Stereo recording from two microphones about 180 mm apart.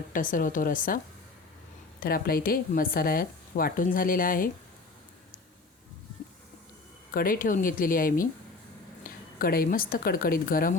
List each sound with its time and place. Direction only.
0.1 s speech: 50° left (ahead or behind)
2.0 s speech: 55° left (ahead or behind)
7.1 s speech: 50° left (ahead or behind)